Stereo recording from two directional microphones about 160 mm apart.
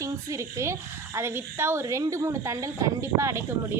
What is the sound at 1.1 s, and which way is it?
A woman's voice, 15° right (ahead or behind).